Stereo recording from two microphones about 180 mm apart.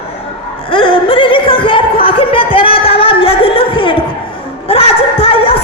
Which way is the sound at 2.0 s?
30° left (ahead or behind).